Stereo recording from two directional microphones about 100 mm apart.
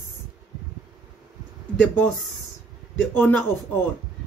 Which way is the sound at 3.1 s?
15° left (ahead or behind).